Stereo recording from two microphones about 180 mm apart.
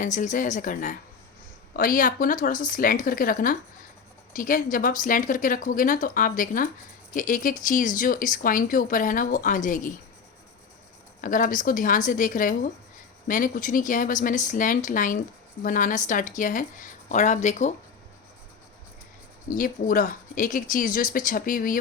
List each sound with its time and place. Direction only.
0.0 s speech: 45° left (ahead or behind)
11.2 s speech: 50° left (ahead or behind)
19.5 s speech: 50° left (ahead or behind)